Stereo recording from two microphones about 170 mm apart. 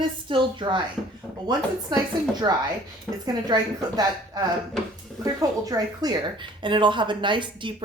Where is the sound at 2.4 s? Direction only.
25° right (ahead or behind).